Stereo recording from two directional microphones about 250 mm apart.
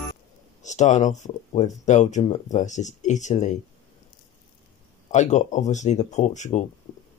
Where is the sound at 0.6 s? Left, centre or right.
Left.